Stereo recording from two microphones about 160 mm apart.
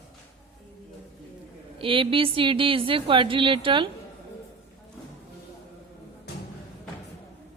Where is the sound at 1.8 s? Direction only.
35° right (ahead or behind).